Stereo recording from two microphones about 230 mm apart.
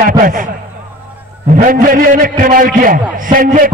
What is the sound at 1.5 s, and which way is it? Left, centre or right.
A man's voice, right.